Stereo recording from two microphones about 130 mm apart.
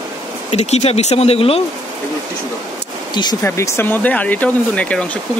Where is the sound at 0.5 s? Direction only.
55° left (ahead or behind).